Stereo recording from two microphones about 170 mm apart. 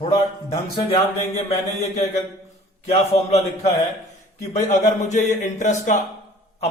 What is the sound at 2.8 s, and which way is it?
A man's voice, 40° left (ahead or behind).